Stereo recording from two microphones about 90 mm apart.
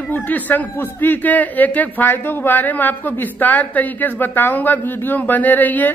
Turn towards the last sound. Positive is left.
turn(degrees=20)  # may be behind; listen again after turning